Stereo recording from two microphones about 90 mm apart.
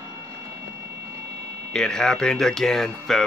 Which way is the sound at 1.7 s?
5° left (ahead or behind).